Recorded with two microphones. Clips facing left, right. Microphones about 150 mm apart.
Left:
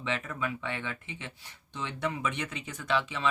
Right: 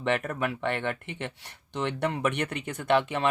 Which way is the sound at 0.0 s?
60° right (ahead or behind).